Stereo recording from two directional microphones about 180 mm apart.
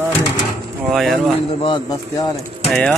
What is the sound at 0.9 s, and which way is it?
Speech, centre (ahead or behind).